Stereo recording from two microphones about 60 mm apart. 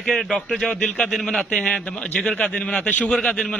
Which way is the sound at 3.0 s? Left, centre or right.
Centre.